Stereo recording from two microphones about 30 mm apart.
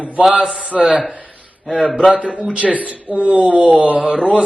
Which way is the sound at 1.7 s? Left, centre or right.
Centre.